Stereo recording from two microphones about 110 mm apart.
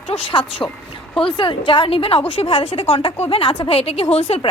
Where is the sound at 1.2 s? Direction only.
50° left (ahead or behind).